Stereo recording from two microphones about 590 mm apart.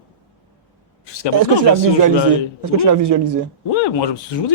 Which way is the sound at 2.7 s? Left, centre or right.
Right.